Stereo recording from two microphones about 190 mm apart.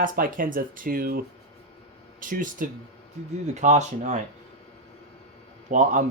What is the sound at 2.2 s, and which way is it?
Speech, 45° right (ahead or behind).